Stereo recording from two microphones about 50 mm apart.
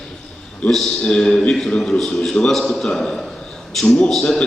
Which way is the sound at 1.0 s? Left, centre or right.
Centre.